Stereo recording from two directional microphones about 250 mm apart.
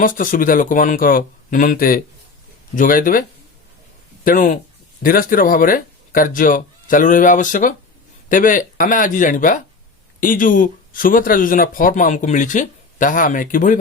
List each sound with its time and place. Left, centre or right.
0.0 s speech: left